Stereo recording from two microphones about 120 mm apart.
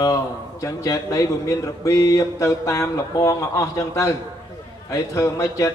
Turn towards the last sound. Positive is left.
turn(degrees=25)  # may be behind; listen again after turning